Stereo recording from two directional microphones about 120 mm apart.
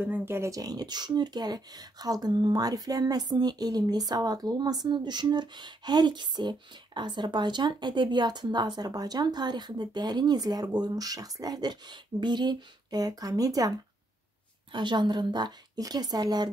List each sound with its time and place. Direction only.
0.0 s speech: 15° right (ahead or behind); by 16.4 s 35° right (ahead or behind)